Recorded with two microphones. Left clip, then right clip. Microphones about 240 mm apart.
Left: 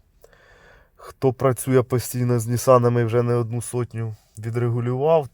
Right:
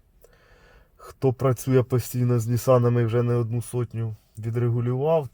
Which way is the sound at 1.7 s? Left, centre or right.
Left.